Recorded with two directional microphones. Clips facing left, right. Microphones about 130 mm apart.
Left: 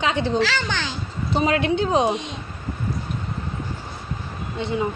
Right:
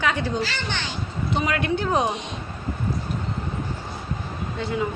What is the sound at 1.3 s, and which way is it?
Speech, 30° left (ahead or behind).